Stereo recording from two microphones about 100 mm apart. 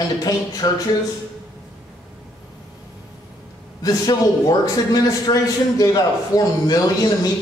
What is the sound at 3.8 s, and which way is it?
A man's voice, 40° left (ahead or behind).